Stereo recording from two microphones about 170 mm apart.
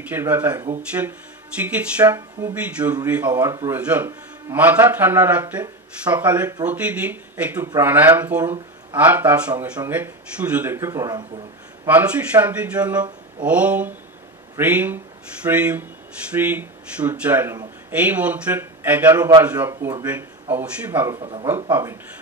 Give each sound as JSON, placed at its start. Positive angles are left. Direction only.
{"t": 0.1, "sound": "speech", "side_deg": -10}
{"t": 1.6, "sound": "speech", "side_deg": -10}
{"t": 11.9, "sound": "speech", "side_deg": -10}
{"t": 21.2, "sound": "speech", "side_deg": -30}